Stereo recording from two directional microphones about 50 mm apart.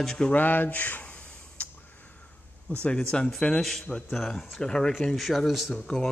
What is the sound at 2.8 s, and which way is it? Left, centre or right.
Speech, centre.